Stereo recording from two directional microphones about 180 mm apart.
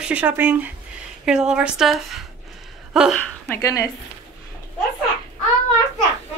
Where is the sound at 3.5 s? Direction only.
15° left (ahead or behind).